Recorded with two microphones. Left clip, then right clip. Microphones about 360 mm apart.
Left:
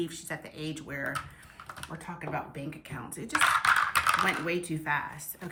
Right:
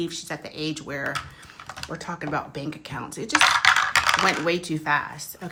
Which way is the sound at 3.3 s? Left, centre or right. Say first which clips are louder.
Right 6 dB; right.